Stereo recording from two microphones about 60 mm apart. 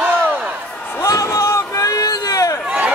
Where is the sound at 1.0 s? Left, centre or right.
Left.